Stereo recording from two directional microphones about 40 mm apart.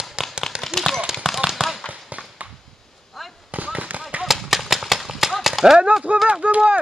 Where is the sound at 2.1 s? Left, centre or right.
Right.